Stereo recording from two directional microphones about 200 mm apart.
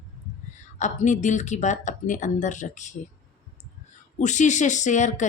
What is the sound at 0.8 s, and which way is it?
Speech, 35° left (ahead or behind).